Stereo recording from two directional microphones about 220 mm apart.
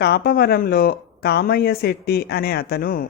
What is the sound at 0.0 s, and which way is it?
Speech, 45° left (ahead or behind).